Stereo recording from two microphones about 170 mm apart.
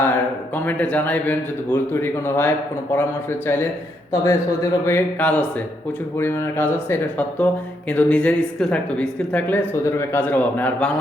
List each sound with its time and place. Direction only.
0.0 s a man's voice: 10° left (ahead or behind)